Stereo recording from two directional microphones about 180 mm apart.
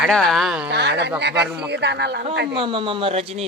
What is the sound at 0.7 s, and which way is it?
Speech, 70° right (ahead or behind).